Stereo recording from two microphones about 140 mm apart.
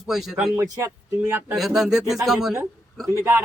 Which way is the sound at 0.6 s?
25° right (ahead or behind).